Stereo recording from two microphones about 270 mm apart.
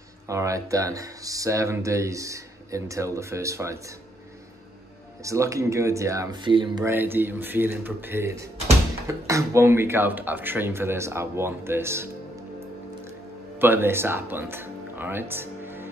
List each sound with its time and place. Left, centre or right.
0.3 s speech: centre
5.2 s speech: centre
13.6 s speech: centre